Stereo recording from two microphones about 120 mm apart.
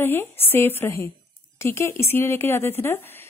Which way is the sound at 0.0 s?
20° left (ahead or behind).